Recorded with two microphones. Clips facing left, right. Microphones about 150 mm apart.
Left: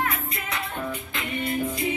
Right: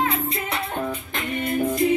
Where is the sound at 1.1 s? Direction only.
45° right (ahead or behind).